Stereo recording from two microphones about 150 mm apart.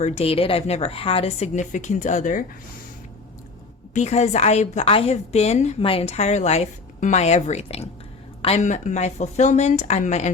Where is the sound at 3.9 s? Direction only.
50° left (ahead or behind).